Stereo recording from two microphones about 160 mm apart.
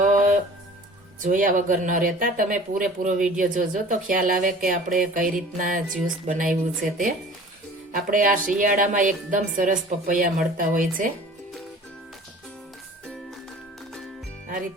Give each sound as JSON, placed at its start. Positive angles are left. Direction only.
{"t": 0.0, "sound": "music", "side_deg": -50}
{"t": 1.2, "sound": "speech", "side_deg": -55}